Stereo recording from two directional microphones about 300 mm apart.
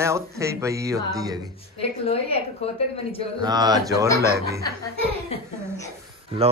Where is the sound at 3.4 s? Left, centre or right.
Centre.